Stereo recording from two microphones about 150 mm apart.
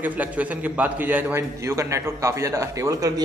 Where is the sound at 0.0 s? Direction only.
10° right (ahead or behind).